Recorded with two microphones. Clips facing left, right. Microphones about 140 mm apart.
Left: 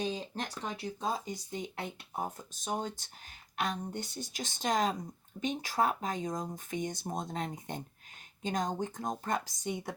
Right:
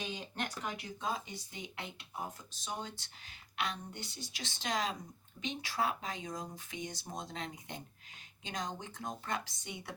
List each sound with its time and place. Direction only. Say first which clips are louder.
0.0 s speech: left 5 dB; 35° left (ahead or behind)